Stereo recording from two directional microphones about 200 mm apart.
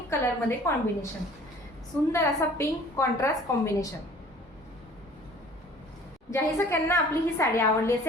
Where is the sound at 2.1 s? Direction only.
15° left (ahead or behind).